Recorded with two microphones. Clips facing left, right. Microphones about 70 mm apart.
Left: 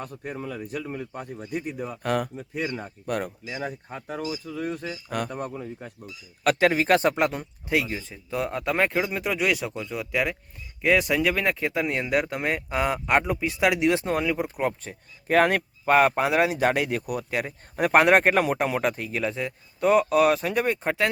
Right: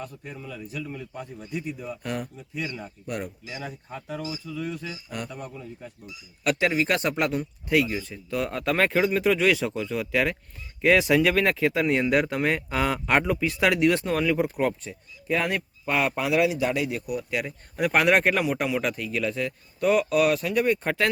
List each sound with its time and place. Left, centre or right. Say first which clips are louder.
0.0 s speech: left 4 dB; left
3.4 s speech: left 4 dB; left; by 13.8 s centre
14.0 s speech: even; left
14.3 s speech: right 2 dB; centre
14.8 s speech: left 1 dB; left
17.3 s speech: left 1 dB; left
20.8 s speech: even; centre